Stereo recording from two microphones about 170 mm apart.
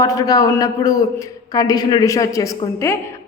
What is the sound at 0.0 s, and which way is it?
A woman's voice, 20° left (ahead or behind).